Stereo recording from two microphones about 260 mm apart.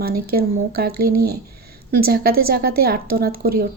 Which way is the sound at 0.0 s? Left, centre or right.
Right.